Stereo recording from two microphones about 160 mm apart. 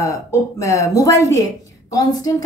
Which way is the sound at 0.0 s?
20° left (ahead or behind).